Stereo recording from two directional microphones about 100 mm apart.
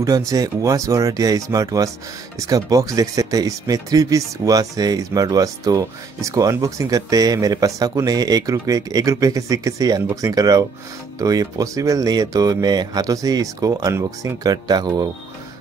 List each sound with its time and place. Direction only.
0.3 s speech: 35° right (ahead or behind)